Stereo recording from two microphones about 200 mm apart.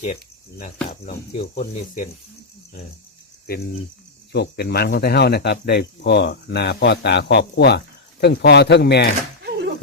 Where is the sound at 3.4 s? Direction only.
50° left (ahead or behind).